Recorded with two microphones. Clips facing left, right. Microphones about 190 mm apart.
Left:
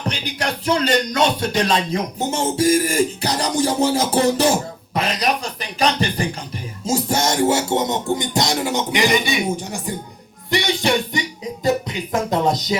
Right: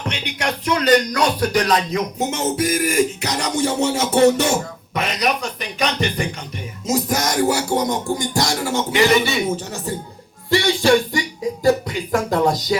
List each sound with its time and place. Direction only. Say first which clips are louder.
0.1 s music: right 1 dB; 35° left (ahead or behind)